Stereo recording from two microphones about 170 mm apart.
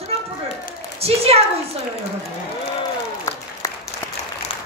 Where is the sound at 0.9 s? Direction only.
35° right (ahead or behind).